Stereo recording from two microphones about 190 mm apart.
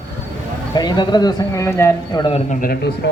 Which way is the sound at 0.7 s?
20° left (ahead or behind).